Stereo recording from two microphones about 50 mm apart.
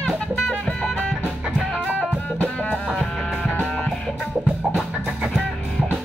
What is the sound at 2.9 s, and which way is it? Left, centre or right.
Music, centre.